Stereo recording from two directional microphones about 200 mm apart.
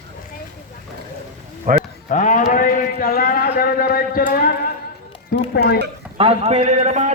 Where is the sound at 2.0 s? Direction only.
40° left (ahead or behind).